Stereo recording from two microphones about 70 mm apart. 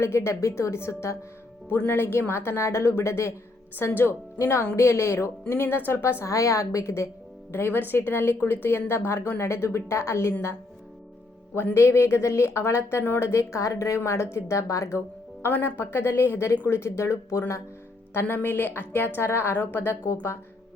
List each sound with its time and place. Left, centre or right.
0.0 s speech: left
11.5 s speech: left
15.4 s speech: left
18.1 s speech: left